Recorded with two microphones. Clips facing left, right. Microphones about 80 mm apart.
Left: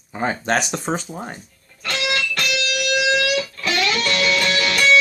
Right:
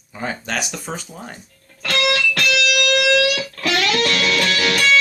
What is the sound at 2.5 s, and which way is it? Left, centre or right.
Music, right.